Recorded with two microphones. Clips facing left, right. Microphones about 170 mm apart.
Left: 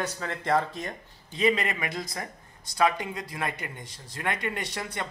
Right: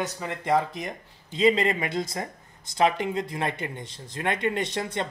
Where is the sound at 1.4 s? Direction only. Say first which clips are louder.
Right 4 dB; 30° right (ahead or behind).